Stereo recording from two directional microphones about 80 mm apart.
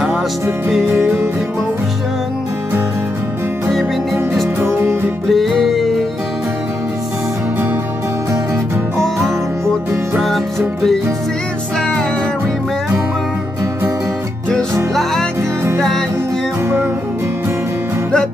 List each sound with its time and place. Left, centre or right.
3.7 s music: centre
4.6 s music: right
5.3 s music: centre
8.9 s music: centre